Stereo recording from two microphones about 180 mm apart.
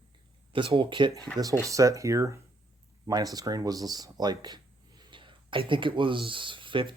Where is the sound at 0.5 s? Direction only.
30° right (ahead or behind).